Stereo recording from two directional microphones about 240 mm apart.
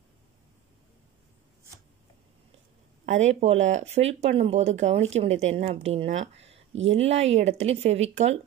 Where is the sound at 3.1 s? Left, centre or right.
Right.